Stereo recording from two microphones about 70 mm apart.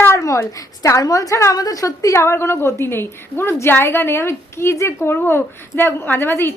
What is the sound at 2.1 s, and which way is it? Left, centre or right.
A woman's voice, left.